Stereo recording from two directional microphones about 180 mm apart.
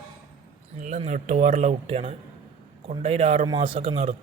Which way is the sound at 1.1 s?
40° right (ahead or behind).